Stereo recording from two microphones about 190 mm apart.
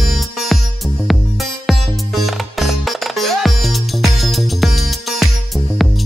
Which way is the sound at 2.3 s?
Centre (ahead or behind).